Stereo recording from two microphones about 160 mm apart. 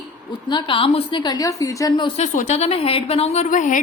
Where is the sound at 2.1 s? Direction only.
50° left (ahead or behind).